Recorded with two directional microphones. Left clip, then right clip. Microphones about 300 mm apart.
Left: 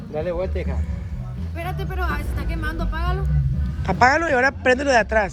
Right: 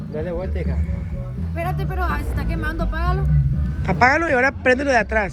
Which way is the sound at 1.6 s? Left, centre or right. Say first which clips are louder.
Right 3 dB; centre.